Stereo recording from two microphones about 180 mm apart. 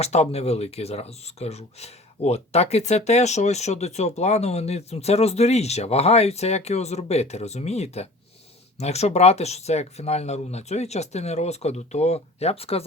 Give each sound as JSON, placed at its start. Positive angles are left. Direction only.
{"t": 0.0, "sound": "speech", "side_deg": 35}